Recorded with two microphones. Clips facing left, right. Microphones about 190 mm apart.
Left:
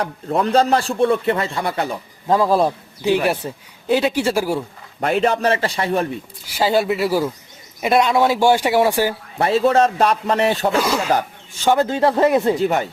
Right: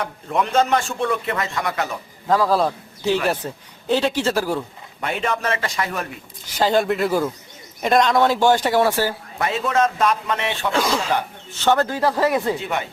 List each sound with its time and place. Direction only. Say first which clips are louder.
0.0 s a man's voice: left 3 dB; 35° left (ahead or behind)
2.2 s a man's voice: left 2 dB; 20° left (ahead or behind)
5.2 s a man's voice: left 4 dB; 35° left (ahead or behind)
6.4 s speech: left 1 dB; 10° left (ahead or behind)
9.4 s a man's voice: left 5 dB; 35° left (ahead or behind)
10.7 s speech: left 3 dB; 10° left (ahead or behind)
11.9 s speech: left 4 dB; 25° left (ahead or behind)
12.5 s a man's voice: left 7 dB; 40° left (ahead or behind)